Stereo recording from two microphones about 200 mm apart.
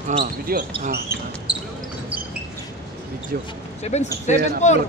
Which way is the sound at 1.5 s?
5° right (ahead or behind).